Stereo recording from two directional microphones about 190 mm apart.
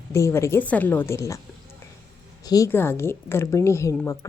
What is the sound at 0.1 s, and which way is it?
Speech, 15° left (ahead or behind).